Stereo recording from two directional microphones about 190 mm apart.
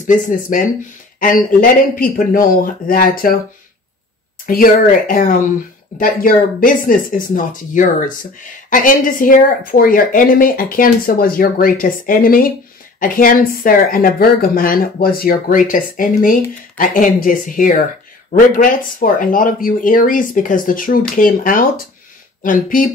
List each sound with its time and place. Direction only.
0.0 s speech: 45° left (ahead or behind)
4.5 s speech: 45° left (ahead or behind)